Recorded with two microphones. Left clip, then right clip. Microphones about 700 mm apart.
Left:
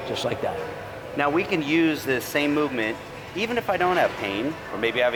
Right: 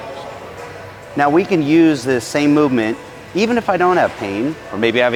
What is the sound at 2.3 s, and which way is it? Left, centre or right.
Speech, right.